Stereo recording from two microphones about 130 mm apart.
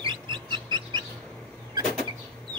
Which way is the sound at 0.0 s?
35° right (ahead or behind).